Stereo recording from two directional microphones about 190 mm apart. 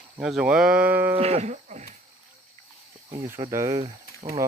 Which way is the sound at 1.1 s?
35° right (ahead or behind).